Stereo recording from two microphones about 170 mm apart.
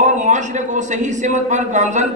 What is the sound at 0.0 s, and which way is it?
A man's voice, 45° right (ahead or behind).